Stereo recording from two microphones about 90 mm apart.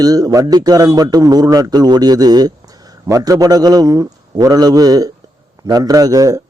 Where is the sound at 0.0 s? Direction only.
45° right (ahead or behind).